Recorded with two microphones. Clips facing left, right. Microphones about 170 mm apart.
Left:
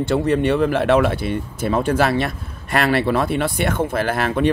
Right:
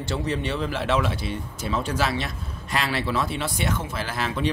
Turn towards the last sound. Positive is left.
turn(degrees=55)  # may be behind; listen again after turning